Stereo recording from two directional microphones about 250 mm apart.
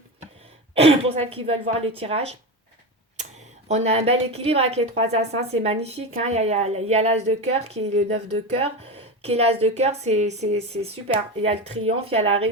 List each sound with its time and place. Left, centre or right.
0.7 s a woman's voice: right
3.7 s a woman's voice: right